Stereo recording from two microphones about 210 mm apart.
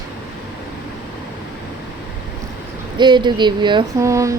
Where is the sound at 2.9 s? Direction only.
20° right (ahead or behind).